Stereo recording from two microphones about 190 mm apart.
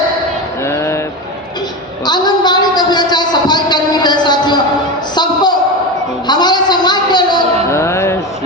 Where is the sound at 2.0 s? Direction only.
20° left (ahead or behind).